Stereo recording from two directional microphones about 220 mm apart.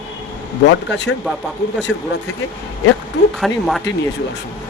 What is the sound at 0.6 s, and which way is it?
Speech, 55° left (ahead or behind).